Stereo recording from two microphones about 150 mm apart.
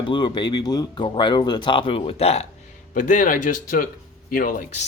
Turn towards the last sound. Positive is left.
turn(degrees=70)  # may be behind; listen again after turning